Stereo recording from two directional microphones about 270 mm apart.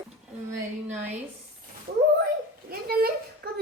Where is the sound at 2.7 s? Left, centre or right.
Right.